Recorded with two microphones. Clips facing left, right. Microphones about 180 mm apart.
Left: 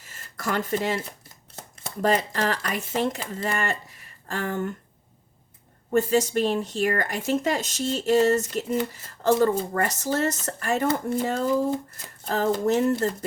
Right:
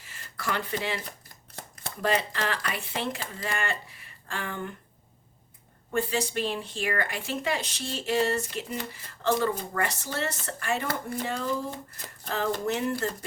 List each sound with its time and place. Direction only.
0.0 s speech: 45° left (ahead or behind)
5.9 s speech: 40° left (ahead or behind)